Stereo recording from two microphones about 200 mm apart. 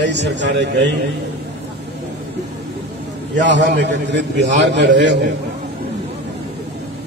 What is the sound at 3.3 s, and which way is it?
A man's voice, 65° right (ahead or behind).